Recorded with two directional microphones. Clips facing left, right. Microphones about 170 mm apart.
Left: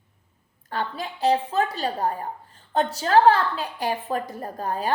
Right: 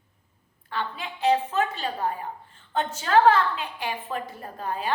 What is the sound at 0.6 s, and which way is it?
A woman's voice, 40° left (ahead or behind).